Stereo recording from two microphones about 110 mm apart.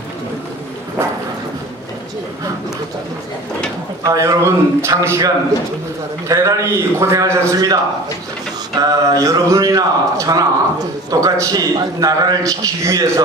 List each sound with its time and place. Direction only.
4.0 s a man's voice: 30° right (ahead or behind)